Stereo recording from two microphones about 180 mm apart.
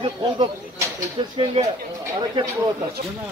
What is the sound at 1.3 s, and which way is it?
Speech, 30° right (ahead or behind).